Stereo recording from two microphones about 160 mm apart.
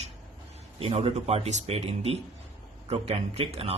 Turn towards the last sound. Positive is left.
turn(degrees=-40)  # may be behind; listen again after turning